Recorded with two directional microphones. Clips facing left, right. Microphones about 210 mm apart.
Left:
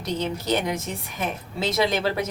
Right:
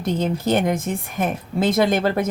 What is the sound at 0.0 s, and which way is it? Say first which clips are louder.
A woman's voice: right 6 dB; 50° right (ahead or behind).